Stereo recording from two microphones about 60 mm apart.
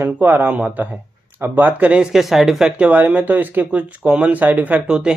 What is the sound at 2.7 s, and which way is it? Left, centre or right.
Speech, right.